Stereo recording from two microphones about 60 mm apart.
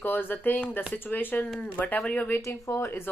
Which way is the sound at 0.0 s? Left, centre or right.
Left.